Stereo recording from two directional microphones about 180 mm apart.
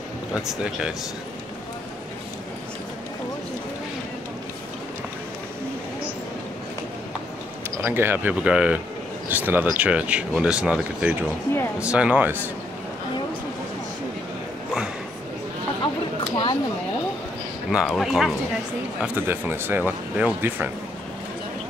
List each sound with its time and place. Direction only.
0.3 s speech: 5° right (ahead or behind)
7.7 s speech: 15° right (ahead or behind)
15.8 s a sound: 25° left (ahead or behind)
17.6 s speech: centre (ahead or behind)